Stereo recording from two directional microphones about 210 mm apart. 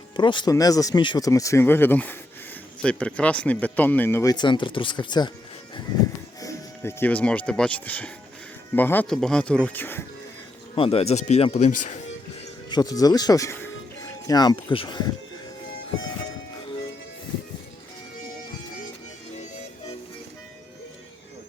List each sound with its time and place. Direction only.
0.2 s speech: 20° left (ahead or behind)
6.4 s speech: 15° left (ahead or behind)
10.8 s speech: 30° left (ahead or behind)
12.7 s speech: 15° left (ahead or behind)